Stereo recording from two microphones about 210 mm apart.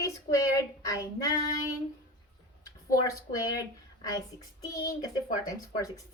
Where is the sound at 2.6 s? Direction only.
15° left (ahead or behind).